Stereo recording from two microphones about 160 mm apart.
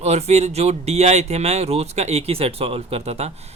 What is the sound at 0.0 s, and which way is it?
Speech, 40° right (ahead or behind).